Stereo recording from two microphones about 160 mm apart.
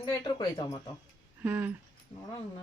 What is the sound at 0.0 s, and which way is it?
Speech, 25° left (ahead or behind).